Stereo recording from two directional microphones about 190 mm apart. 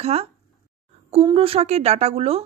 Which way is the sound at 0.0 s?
35° right (ahead or behind).